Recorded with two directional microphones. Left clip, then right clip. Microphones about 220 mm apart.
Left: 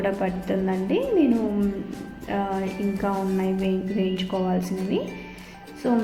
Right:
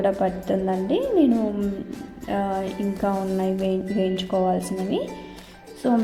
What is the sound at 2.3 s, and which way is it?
A woman's voice, 30° right (ahead or behind).